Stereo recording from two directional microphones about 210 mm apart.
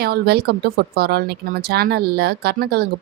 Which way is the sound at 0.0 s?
50° right (ahead or behind).